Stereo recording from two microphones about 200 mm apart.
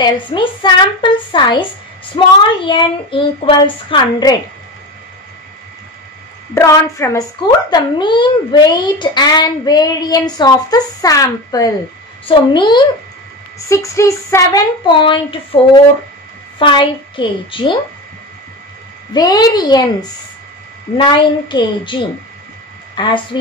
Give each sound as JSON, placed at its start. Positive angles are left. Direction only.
{"t": 0.0, "sound": "a child's voice", "side_deg": 25}
{"t": 6.5, "sound": "a woman's voice", "side_deg": 15}
{"t": 19.1, "sound": "a child's voice", "side_deg": 20}